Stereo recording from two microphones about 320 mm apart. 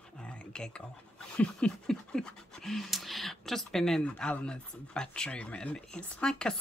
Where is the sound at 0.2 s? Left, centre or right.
Centre.